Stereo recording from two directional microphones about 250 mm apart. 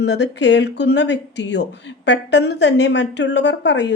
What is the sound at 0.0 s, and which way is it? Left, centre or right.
Speech, left.